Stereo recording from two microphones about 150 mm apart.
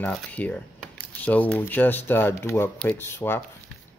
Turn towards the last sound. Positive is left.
turn(degrees=15)  # may be behind; listen again after turning